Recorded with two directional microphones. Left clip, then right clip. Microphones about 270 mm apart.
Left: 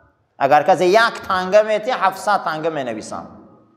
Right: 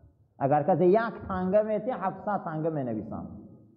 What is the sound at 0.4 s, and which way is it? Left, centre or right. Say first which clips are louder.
A man's voice: left 11 dB; centre.